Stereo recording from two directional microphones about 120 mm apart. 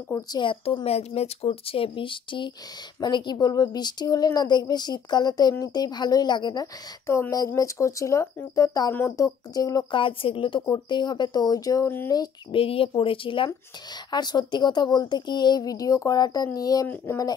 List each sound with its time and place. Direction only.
0.3 s a woman's voice: 45° left (ahead or behind)
9.8 s speech: 45° left (ahead or behind)
12.5 s a woman's voice: 50° left (ahead or behind)
14.1 s speech: 35° left (ahead or behind)
16.8 s speech: 15° left (ahead or behind)